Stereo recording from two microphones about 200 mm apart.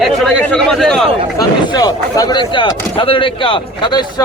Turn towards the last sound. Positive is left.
turn(degrees=25)  # may be behind; listen again after turning